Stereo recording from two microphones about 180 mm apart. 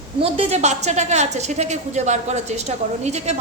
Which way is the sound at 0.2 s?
35° right (ahead or behind).